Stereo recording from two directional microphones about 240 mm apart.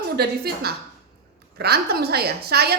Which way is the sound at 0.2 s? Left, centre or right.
Right.